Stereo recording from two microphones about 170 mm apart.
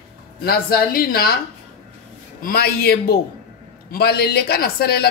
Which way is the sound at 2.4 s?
65° left (ahead or behind).